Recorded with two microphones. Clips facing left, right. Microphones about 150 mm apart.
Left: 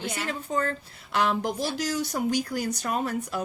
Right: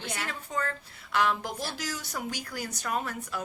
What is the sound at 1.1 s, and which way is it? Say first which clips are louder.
Speech: left 3 dB; 25° left (ahead or behind).